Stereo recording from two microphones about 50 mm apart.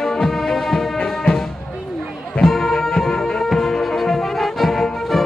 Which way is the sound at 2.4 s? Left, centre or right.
Centre.